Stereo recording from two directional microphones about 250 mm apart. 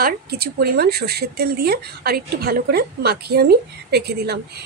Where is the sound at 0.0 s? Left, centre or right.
Right.